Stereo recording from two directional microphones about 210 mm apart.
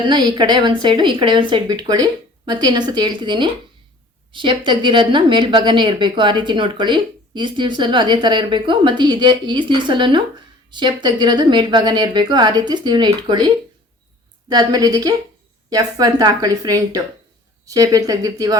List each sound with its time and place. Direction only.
0.0 s a woman's voice: 20° right (ahead or behind)
14.5 s a woman's voice: 20° right (ahead or behind)